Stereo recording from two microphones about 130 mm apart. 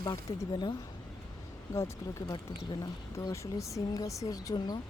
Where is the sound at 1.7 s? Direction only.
20° left (ahead or behind).